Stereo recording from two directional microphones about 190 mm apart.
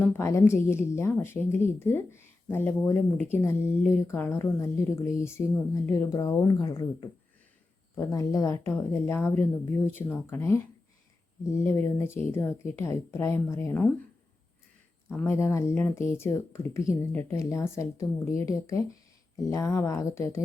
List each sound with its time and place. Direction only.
0.0 s a woman's voice: 15° left (ahead or behind)
15.1 s a woman's voice: 15° left (ahead or behind)